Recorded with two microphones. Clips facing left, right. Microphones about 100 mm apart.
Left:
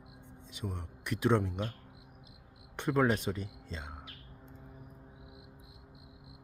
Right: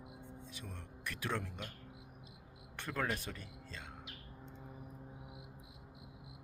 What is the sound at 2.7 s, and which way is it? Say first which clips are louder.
Speech: left 10 dB; 20° left (ahead or behind).